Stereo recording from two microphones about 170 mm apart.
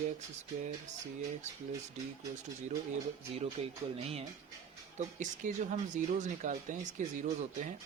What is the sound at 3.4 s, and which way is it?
Speech, 35° right (ahead or behind).